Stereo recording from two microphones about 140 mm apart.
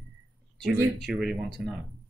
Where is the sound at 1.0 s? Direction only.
5° right (ahead or behind).